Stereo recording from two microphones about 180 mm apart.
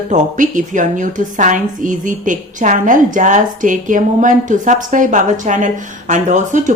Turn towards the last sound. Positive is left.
turn(degrees=-45)  # may be behind; listen again after turning